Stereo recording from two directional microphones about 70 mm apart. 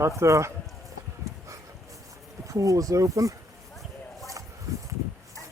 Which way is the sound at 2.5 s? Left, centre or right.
Right.